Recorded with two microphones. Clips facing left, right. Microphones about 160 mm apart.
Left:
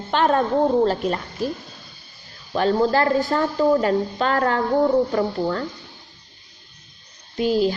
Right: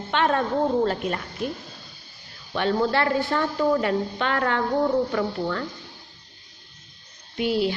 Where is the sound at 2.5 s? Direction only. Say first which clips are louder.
Left 4 dB; 35° left (ahead or behind).